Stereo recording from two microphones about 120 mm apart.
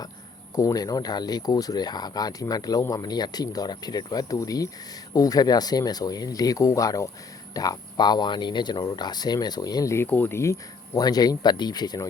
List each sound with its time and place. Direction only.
0.5 s speech: 30° left (ahead or behind)